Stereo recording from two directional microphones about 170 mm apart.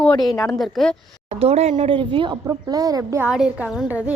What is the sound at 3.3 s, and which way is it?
Speech, 5° right (ahead or behind).